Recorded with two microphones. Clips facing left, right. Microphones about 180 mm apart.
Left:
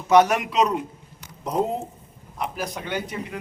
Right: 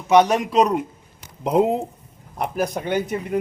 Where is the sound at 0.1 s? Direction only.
20° right (ahead or behind).